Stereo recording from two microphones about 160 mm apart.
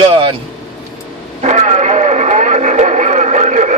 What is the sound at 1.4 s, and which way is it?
Radio, 45° right (ahead or behind).